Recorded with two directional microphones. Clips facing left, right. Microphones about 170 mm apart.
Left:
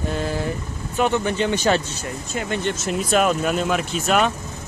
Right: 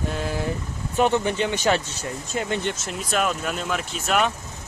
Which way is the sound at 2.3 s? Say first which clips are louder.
Right 1 dB; 30° right (ahead or behind).